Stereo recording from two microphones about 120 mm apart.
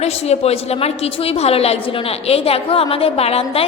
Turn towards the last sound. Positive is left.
turn(degrees=55)  # may be behind; listen again after turning